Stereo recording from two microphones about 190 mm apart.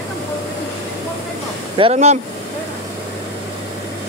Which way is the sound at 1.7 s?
30° right (ahead or behind).